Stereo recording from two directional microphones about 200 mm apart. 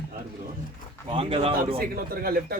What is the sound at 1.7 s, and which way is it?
Speech, 50° right (ahead or behind).